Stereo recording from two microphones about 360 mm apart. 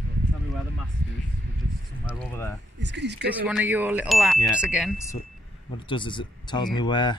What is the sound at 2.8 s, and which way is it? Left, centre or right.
Speech, right.